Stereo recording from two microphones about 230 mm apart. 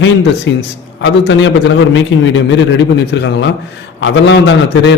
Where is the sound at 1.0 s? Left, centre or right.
Left.